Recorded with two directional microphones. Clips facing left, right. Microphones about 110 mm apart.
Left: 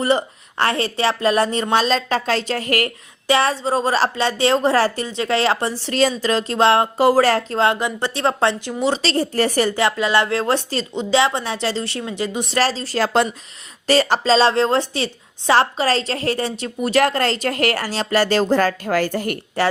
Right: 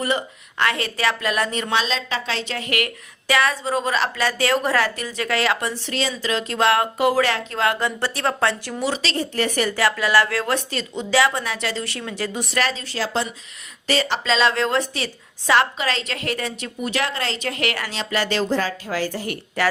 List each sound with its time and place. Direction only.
0.0 s a woman's voice: 35° left (ahead or behind)
3.2 s a woman's voice: 30° left (ahead or behind)
7.8 s speech: 15° left (ahead or behind)
12.5 s a woman's voice: 35° left (ahead or behind); by 19.4 s 55° left (ahead or behind)